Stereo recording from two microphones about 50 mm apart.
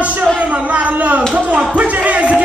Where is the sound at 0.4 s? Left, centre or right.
Right.